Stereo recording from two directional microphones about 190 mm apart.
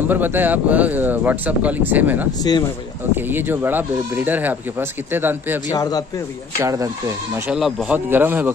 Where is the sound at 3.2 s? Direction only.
10° right (ahead or behind).